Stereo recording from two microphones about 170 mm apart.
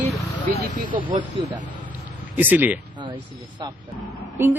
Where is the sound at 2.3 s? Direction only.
10° right (ahead or behind).